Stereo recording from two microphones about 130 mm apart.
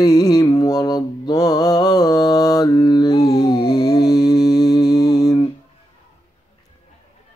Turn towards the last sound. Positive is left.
turn(degrees=25)  # may be behind; listen again after turning